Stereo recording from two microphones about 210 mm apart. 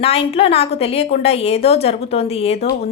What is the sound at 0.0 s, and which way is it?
Speech, 30° left (ahead or behind).